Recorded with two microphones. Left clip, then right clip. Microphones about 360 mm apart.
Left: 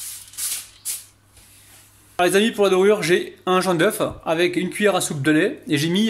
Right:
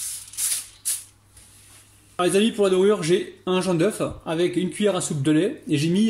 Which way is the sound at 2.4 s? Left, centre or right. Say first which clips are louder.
Left 3 dB; left.